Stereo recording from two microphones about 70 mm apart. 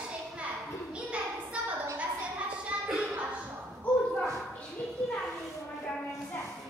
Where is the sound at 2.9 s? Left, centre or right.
Centre.